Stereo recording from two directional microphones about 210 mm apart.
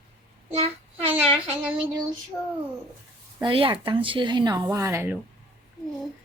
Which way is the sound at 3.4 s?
25° right (ahead or behind).